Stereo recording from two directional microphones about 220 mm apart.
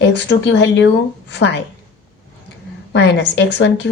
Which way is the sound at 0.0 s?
50° left (ahead or behind).